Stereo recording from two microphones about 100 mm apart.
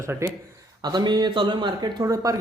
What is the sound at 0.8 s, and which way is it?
Speech, 45° right (ahead or behind).